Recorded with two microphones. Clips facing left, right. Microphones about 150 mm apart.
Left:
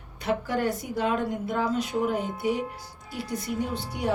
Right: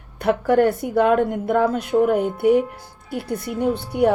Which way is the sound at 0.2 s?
60° right (ahead or behind).